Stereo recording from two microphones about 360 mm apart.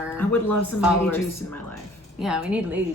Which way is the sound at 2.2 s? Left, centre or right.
Centre.